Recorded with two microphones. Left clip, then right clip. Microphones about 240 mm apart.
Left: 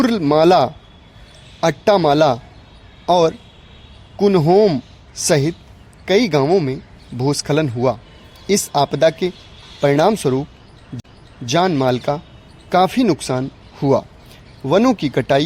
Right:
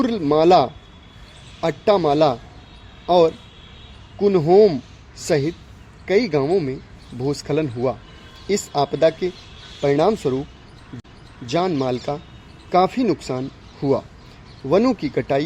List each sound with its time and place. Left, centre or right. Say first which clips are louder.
0.0 s speech: left 3 dB; left
11.4 s speech: left 5 dB; left